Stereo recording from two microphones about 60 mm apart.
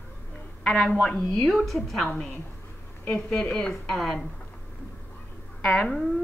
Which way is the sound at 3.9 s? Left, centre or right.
Centre.